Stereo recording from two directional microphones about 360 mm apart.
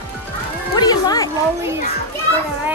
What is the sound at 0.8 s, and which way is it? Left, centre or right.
Speech, centre.